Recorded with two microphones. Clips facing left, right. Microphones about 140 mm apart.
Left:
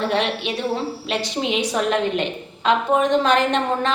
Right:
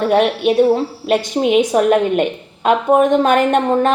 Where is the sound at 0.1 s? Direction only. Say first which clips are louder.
Right 9 dB; 55° right (ahead or behind).